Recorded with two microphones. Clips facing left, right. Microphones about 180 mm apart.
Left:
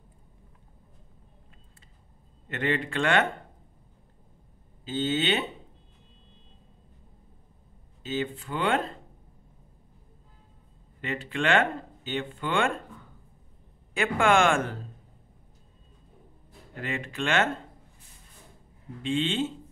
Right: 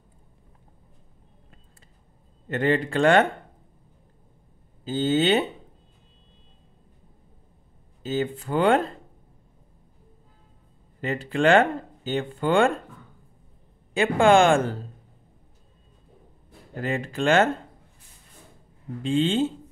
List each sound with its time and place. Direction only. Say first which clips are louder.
2.4 s speech: right 6 dB; 40° right (ahead or behind)
4.8 s speech: right 6 dB; 40° right (ahead or behind)
8.0 s speech: right 4 dB; 40° right (ahead or behind)
11.0 s speech: right 6 dB; 40° right (ahead or behind)
13.9 s speech: right 5 dB; 30° right (ahead or behind)
16.7 s speech: right 6 dB; 40° right (ahead or behind)
19.0 s speech: right 5 dB; 40° right (ahead or behind)